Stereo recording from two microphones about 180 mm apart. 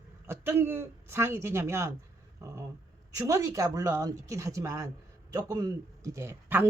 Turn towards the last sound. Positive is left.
turn(degrees=-10)  # may be behind; listen again after turning